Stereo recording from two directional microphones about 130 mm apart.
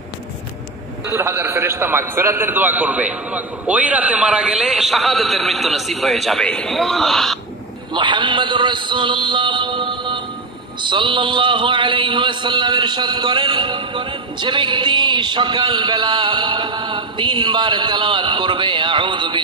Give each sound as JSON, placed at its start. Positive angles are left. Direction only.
{"t": 1.0, "sound": "a man's voice", "side_deg": -20}
{"t": 7.9, "sound": "a man's voice", "side_deg": -35}
{"t": 10.8, "sound": "mantra", "side_deg": -40}